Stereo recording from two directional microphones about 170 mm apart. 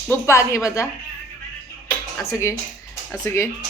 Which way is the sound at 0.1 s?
15° left (ahead or behind).